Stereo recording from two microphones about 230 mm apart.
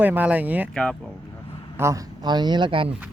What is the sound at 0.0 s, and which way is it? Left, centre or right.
Speech, centre.